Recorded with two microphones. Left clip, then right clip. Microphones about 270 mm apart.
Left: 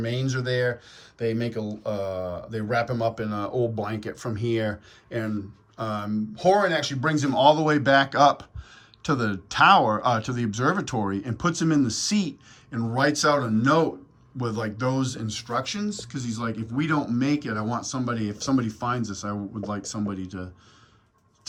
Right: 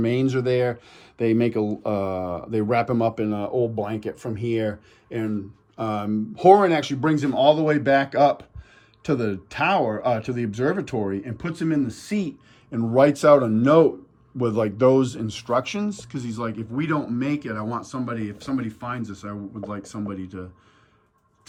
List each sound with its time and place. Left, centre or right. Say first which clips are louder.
0.0 s speech: right 7 dB; centre
3.2 s speech: right 3 dB; centre